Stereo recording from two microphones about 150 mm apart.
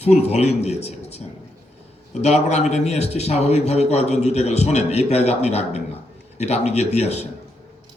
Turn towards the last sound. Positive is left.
turn(degrees=45)  # may be behind; listen again after turning